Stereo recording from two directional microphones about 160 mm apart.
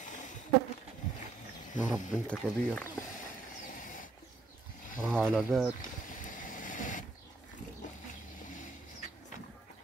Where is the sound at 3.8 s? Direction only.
55° left (ahead or behind).